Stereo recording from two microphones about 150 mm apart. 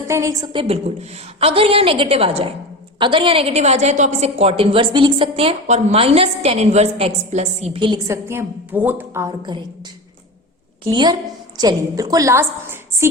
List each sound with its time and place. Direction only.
0.1 s a woman's voice: 20° right (ahead or behind)
0.5 s a woman's voice: 40° right (ahead or behind)
7.8 s a woman's voice: 25° right (ahead or behind)
9.4 s a woman's voice: 30° right (ahead or behind)
10.8 s a woman's voice: 30° right (ahead or behind)